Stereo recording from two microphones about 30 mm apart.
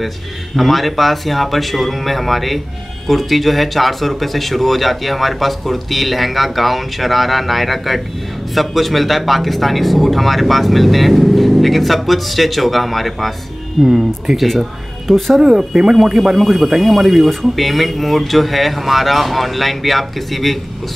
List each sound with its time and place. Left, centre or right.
0.6 s speech: centre
15.0 s speech: centre
15.4 s speech: right; by 20.5 s centre